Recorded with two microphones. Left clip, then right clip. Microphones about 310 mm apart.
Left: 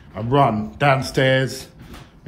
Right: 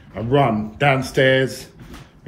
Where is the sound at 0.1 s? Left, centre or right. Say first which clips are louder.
Even; centre.